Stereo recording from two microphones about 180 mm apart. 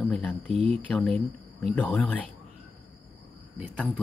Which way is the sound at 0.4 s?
35° right (ahead or behind).